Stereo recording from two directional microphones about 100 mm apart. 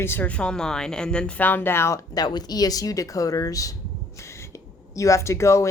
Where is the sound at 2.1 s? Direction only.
45° left (ahead or behind).